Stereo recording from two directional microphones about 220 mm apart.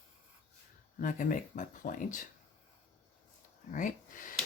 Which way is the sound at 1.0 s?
35° left (ahead or behind).